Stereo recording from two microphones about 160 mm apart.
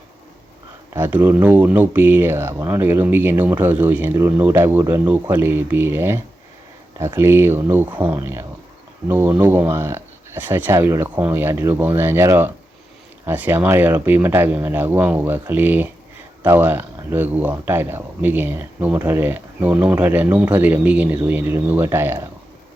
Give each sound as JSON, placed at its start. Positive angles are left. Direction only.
{"t": 0.9, "sound": "speech", "side_deg": -15}